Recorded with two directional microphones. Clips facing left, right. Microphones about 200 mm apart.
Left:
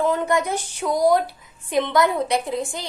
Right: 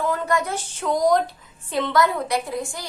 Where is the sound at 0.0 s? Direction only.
20° left (ahead or behind).